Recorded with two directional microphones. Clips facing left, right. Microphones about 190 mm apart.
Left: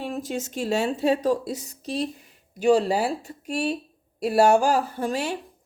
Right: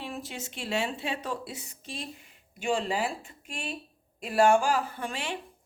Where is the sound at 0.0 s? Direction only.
45° left (ahead or behind).